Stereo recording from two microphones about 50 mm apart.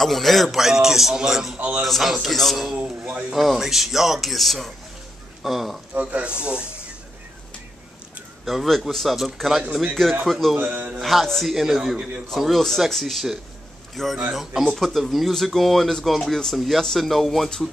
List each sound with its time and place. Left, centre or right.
0.0 s speech: centre
5.9 s speech: right
8.5 s speech: centre
10.6 s a man's voice: right
11.0 s a man's voice: centre
12.4 s speech: centre
14.3 s a man's voice: centre
14.6 s speech: centre